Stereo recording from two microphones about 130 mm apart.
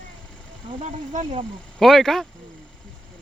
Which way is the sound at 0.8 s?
70° right (ahead or behind).